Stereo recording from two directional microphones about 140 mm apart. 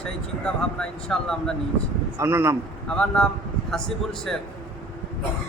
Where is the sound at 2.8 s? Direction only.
5° left (ahead or behind).